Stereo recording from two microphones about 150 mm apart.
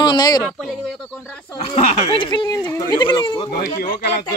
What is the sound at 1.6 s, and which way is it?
Speech, 40° left (ahead or behind).